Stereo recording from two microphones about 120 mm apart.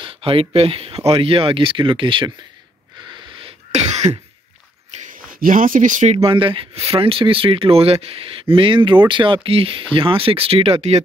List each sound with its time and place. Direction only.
0.0 s speech: 50° right (ahead or behind)
3.4 s cough: 65° right (ahead or behind)
4.9 s a sound: 75° right (ahead or behind)
5.8 s speech: 90° right
6.2 s speech: 45° right (ahead or behind)